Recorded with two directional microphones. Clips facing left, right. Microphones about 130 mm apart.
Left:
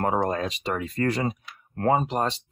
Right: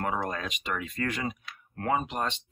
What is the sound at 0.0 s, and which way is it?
Speech, 35° left (ahead or behind).